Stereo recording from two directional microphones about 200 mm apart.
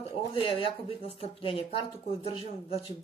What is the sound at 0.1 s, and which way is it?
Speech, 25° left (ahead or behind).